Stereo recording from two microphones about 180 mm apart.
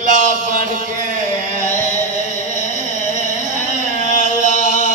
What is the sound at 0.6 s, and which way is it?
Mantra, 50° right (ahead or behind).